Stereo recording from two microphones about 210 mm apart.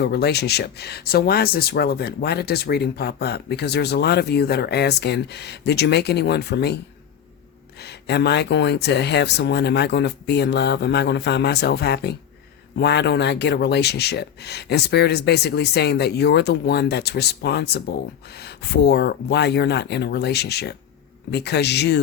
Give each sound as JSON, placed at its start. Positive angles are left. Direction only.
{"t": 0.0, "sound": "speech", "side_deg": 50}
{"t": 7.8, "sound": "speech", "side_deg": 50}